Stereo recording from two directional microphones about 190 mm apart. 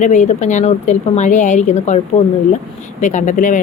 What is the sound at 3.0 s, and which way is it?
Speech, 40° left (ahead or behind).